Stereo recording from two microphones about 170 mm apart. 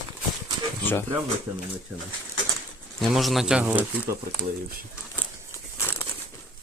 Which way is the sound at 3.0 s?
Centre (ahead or behind).